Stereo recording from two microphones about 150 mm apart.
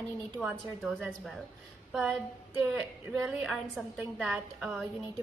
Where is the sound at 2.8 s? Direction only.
Centre (ahead or behind).